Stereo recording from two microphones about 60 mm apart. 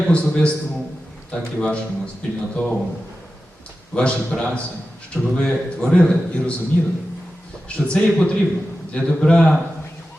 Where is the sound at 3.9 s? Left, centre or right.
Centre.